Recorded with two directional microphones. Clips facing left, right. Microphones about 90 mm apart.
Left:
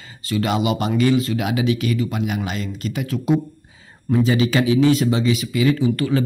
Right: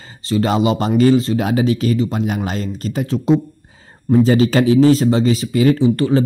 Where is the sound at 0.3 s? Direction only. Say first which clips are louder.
Right 4 dB; 35° right (ahead or behind).